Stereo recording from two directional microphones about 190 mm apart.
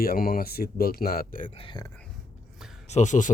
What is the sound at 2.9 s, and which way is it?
Speech, 40° left (ahead or behind).